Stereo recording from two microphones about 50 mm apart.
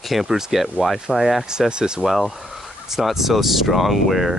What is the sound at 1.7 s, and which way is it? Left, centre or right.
Speech, centre.